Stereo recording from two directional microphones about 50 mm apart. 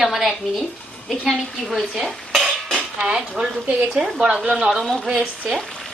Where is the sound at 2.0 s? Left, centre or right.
Centre.